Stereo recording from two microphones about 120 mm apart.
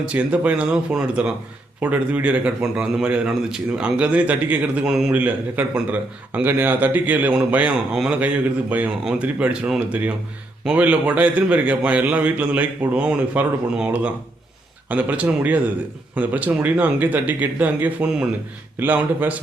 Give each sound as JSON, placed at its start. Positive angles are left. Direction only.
{"t": 0.1, "sound": "a man's voice", "side_deg": -10}